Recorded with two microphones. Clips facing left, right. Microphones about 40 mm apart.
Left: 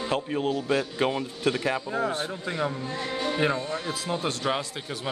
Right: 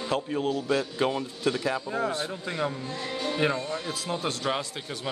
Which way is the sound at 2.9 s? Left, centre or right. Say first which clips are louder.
Left 2 dB; left.